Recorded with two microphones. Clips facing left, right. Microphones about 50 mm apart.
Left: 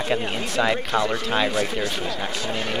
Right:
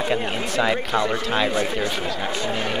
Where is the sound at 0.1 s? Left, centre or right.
Centre.